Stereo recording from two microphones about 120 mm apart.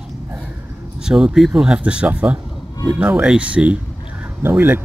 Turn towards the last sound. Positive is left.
turn(degrees=-20)  # may be behind; listen again after turning